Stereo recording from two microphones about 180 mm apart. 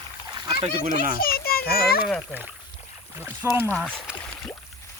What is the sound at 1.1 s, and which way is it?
Children playing, 55° left (ahead or behind).